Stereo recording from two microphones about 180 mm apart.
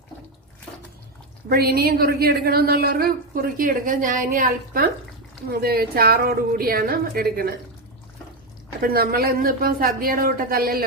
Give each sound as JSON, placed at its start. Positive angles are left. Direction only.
{"t": 1.5, "sound": "a woman's voice", "side_deg": -60}
{"t": 8.8, "sound": "a woman's voice", "side_deg": -55}